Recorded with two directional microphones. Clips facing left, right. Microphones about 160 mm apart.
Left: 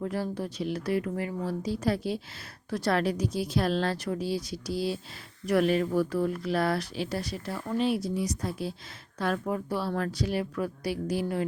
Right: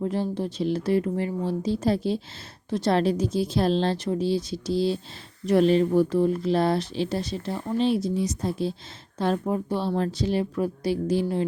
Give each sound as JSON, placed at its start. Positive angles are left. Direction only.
{"t": 0.0, "sound": "speech", "side_deg": -25}